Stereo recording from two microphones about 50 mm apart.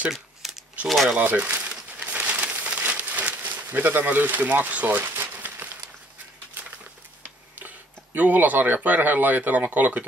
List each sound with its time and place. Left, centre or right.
0.1 s a sound: centre
0.8 s speech: centre
1.1 s speech: right
1.7 s a sound: centre
2.0 s crumpling: right
3.6 s speech: right
5.0 s crumpling: right
5.3 s a sound: right
7.5 s speech: right